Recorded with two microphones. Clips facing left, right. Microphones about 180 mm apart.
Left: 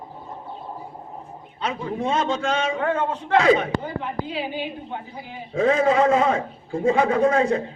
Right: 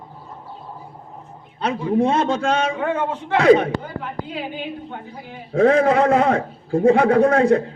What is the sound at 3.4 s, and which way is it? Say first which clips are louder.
Speech: right 6 dB; 60° right (ahead or behind).